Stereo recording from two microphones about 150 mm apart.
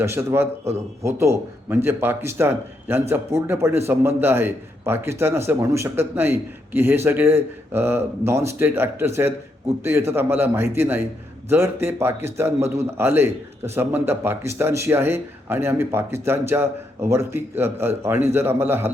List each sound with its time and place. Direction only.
0.0 s a man's voice: 20° right (ahead or behind)